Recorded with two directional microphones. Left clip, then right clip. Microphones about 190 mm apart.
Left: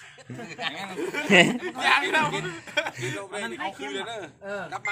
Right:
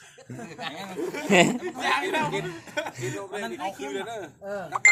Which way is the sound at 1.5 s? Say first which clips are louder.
Left 4 dB; 10° right (ahead or behind).